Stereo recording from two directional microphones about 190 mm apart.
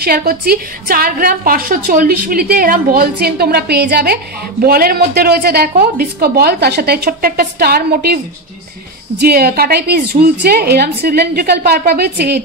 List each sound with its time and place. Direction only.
0.0 s a woman's voice: 50° right (ahead or behind)
9.2 s a woman's voice: 55° right (ahead or behind)